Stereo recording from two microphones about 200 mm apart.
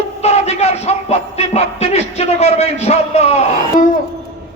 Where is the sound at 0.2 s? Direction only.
30° left (ahead or behind).